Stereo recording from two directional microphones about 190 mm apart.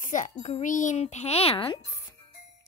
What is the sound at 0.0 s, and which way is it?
A child's voice, 40° left (ahead or behind).